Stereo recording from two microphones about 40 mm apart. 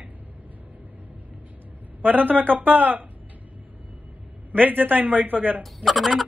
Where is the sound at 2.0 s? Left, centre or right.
Right.